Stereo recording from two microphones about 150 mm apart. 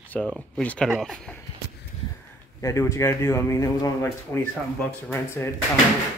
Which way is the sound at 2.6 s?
20° left (ahead or behind).